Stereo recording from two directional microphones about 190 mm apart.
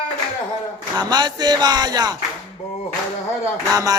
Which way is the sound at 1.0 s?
20° right (ahead or behind).